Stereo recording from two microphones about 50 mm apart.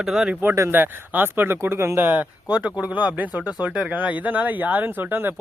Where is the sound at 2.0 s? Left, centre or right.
Right.